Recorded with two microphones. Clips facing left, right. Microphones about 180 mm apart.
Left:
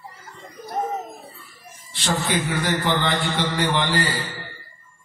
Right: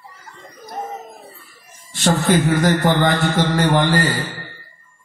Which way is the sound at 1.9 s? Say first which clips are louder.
Right 7 dB; 45° right (ahead or behind).